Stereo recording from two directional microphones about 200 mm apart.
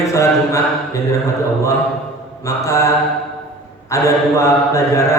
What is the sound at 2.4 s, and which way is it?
Mantra, 15° left (ahead or behind).